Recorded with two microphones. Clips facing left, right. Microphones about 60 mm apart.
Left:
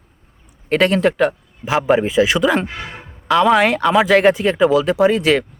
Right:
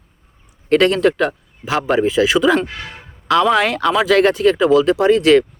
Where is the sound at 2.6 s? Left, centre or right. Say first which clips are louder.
Right 1 dB; centre.